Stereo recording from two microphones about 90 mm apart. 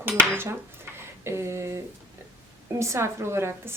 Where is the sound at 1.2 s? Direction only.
30° right (ahead or behind).